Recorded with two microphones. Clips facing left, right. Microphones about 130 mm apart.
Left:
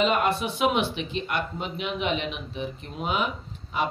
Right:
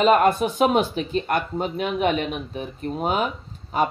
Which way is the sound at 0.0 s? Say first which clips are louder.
Right 6 dB; 45° right (ahead or behind).